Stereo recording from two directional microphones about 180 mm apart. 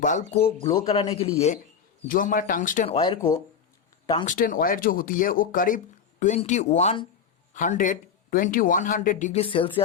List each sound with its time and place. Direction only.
0.0 s speech: 45° left (ahead or behind)
2.0 s speech: 50° left (ahead or behind)
2.9 s speech: 30° left (ahead or behind)
3.2 s speech: 15° left (ahead or behind)
4.3 s speech: 50° left (ahead or behind); by 7.1 s 35° left (ahead or behind)
7.5 s speech: 45° left (ahead or behind); by 9.8 s 30° left (ahead or behind)